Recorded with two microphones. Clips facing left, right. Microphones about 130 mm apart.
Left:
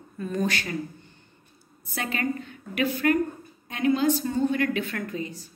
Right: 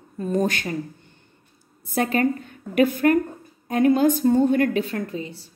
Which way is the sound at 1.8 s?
40° right (ahead or behind).